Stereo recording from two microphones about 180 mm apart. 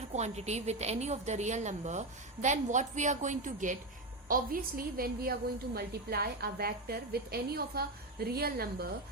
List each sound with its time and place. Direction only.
0.1 s a woman's voice: 40° right (ahead or behind); by 8.9 s 60° right (ahead or behind)